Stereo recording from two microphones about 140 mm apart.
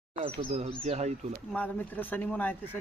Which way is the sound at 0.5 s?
50° right (ahead or behind).